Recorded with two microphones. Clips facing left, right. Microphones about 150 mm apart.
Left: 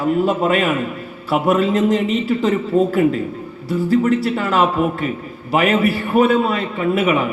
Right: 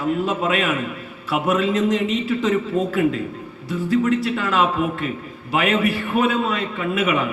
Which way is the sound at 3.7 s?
40° left (ahead or behind).